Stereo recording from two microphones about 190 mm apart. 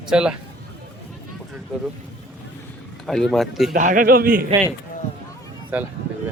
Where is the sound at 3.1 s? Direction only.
Centre (ahead or behind).